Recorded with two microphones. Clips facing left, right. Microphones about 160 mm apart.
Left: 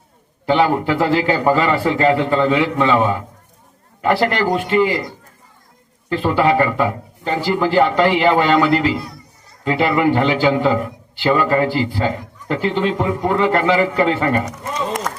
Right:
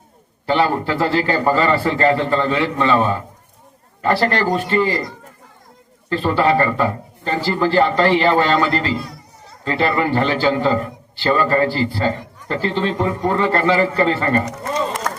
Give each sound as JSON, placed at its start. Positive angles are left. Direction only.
{"t": 0.4, "sound": "a man's voice", "side_deg": 15}
{"t": 6.1, "sound": "a man's voice", "side_deg": 15}